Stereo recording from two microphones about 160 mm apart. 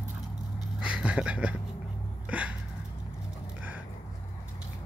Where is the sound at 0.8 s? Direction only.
5° right (ahead or behind).